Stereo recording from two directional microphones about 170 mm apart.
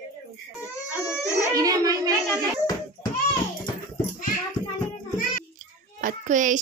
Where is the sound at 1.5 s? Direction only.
20° right (ahead or behind).